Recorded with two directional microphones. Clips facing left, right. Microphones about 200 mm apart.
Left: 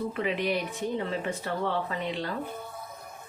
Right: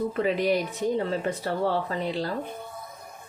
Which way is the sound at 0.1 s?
40° right (ahead or behind).